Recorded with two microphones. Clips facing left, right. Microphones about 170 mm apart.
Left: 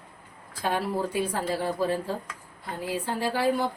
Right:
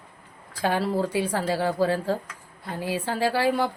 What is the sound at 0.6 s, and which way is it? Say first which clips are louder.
A woman's voice: right 3 dB; 90° right.